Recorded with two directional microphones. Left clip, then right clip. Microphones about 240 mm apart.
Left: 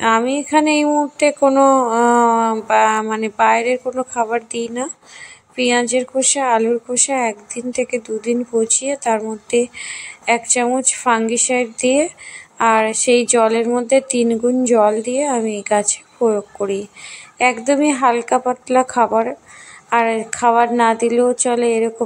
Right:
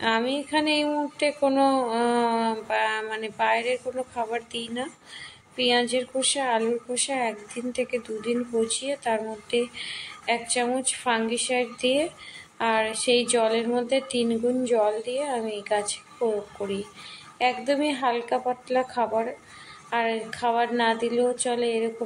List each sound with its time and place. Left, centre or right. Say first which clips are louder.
0.0 s speech: left 9 dB; left